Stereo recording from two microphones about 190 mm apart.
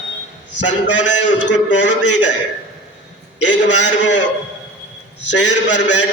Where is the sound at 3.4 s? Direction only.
70° left (ahead or behind).